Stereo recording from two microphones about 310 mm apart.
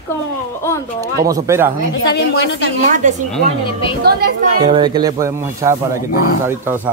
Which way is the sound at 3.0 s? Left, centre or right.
Right.